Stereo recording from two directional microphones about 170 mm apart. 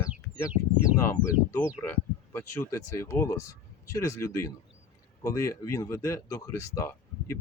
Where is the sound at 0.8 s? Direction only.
15° left (ahead or behind).